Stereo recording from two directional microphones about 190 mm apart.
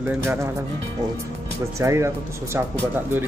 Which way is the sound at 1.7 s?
15° right (ahead or behind).